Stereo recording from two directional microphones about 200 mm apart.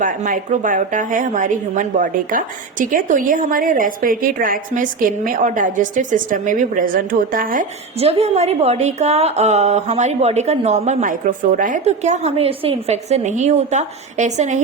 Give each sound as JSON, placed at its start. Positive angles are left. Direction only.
{"t": 0.0, "sound": "a woman's voice", "side_deg": -40}
{"t": 7.9, "sound": "a woman's voice", "side_deg": -30}